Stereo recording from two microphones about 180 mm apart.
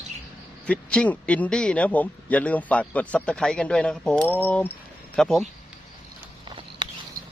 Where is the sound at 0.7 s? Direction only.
5° left (ahead or behind).